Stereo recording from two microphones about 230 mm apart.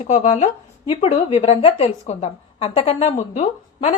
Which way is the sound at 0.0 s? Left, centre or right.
Left.